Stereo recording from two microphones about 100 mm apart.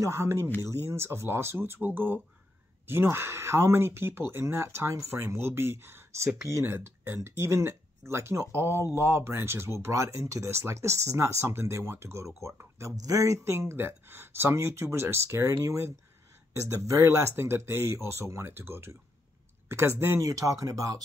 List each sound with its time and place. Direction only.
0.0 s speech: 25° right (ahead or behind)
20.2 s speech: 35° right (ahead or behind)